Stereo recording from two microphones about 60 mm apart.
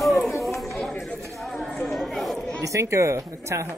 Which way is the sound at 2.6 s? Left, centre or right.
Right.